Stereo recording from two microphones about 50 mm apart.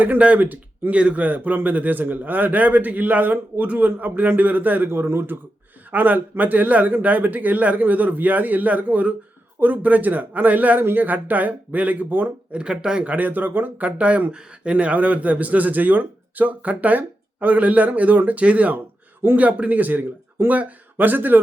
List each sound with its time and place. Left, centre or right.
0.3 s speech: right
4.9 s speech: right
5.9 s speech: right
12.5 s speech: centre
13.1 s a man's voice: right